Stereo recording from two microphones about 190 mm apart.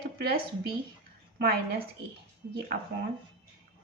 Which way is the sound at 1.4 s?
50° right (ahead or behind).